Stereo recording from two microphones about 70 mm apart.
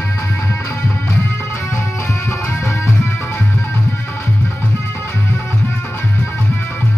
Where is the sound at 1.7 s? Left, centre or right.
Left.